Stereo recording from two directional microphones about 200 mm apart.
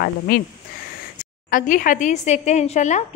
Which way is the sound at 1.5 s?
40° left (ahead or behind).